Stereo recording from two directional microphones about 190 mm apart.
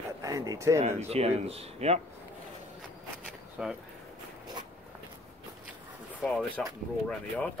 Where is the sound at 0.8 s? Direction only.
35° right (ahead or behind).